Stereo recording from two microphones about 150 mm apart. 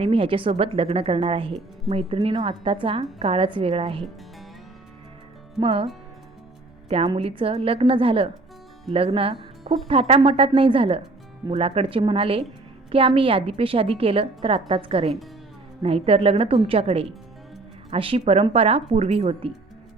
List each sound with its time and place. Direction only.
0.0 s a woman's voice: 40° right (ahead or behind)
5.5 s a woman's voice: 35° right (ahead or behind)